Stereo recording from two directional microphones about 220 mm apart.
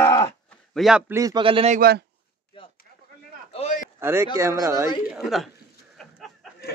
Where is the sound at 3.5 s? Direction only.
35° left (ahead or behind).